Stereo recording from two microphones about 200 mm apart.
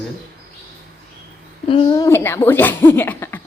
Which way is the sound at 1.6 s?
25° left (ahead or behind).